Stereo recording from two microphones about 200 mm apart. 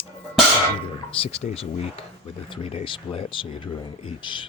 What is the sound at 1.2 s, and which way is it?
Speech, 30° left (ahead or behind).